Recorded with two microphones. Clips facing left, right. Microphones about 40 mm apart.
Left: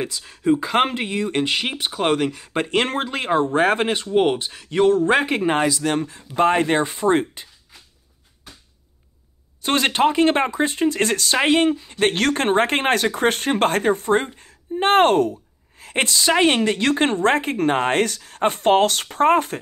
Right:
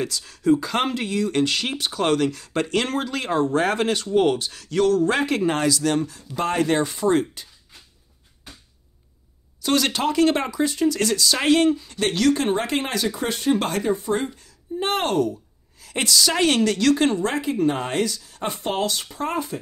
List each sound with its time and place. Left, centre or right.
0.0 s speech: left
9.6 s speech: left
11.4 s a woman's voice: left